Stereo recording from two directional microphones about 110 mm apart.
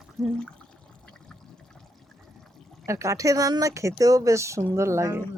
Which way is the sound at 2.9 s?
25° right (ahead or behind).